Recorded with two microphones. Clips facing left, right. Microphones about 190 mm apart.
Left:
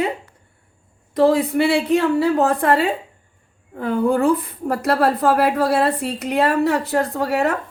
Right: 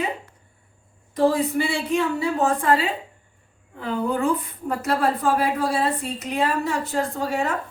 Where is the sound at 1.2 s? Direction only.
60° left (ahead or behind).